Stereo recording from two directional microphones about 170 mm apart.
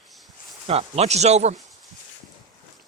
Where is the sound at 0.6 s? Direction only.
40° right (ahead or behind).